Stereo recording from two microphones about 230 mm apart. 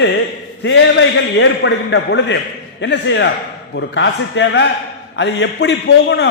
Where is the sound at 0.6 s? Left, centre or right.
Left.